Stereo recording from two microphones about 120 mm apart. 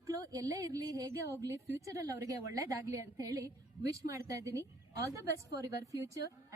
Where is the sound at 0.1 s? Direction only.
30° right (ahead or behind).